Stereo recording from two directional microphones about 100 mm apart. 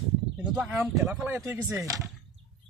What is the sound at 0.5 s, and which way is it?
Speech, 20° right (ahead or behind).